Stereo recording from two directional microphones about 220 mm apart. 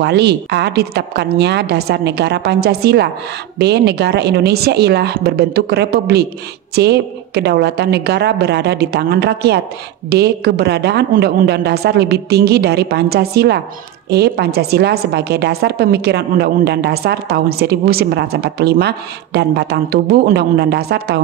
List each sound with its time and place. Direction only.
0.0 s a woman's voice: 50° right (ahead or behind)